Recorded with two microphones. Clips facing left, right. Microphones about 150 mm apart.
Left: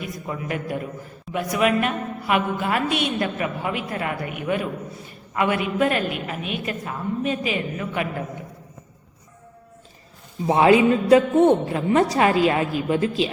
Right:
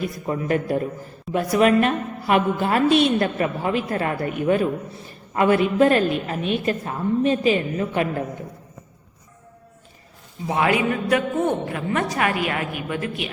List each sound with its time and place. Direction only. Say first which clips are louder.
0.3 s a woman's voice: right 6 dB; 35° right (ahead or behind)
10.4 s a woman's voice: left 5 dB; 25° left (ahead or behind)